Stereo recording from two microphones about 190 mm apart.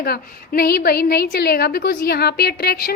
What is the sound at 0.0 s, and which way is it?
A woman's voice, 55° left (ahead or behind).